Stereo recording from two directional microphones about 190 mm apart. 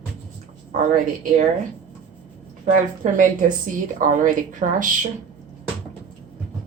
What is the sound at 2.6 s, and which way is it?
A woman's voice, 40° right (ahead or behind).